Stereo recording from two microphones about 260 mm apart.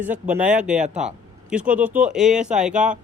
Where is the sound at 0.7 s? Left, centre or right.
Right.